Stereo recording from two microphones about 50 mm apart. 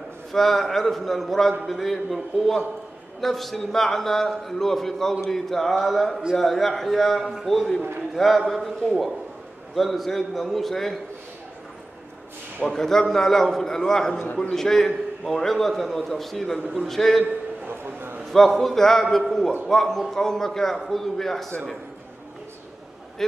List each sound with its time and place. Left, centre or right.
0.3 s a man's voice: centre
12.6 s a man's voice: centre
14.1 s a man's voice: left
14.5 s a man's voice: centre
17.2 s a sound: right
18.3 s a man's voice: centre